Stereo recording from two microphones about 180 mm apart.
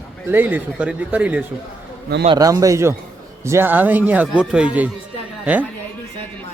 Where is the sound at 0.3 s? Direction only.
10° right (ahead or behind).